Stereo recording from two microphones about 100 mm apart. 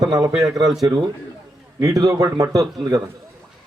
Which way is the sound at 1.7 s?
35° right (ahead or behind).